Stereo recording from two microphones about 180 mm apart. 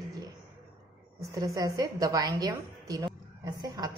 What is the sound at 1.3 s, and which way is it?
A woman's voice, 20° right (ahead or behind).